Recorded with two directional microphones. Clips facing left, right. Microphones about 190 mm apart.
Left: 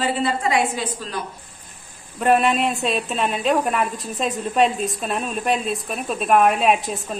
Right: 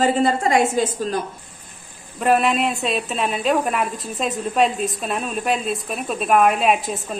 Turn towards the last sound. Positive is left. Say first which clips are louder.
# even
turn(degrees=0)  # may be behind; listen again after turning